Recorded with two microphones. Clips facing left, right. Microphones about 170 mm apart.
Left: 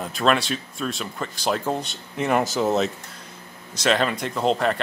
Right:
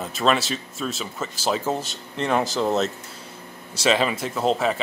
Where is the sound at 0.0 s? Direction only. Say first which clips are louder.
Even; centre (ahead or behind).